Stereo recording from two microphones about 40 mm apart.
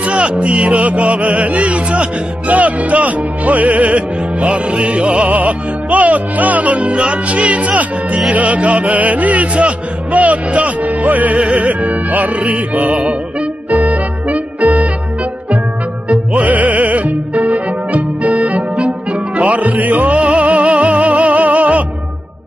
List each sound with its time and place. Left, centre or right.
0.0 s music: right
16.1 s music: right